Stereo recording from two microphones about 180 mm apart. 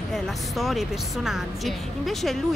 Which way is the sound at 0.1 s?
Centre (ahead or behind).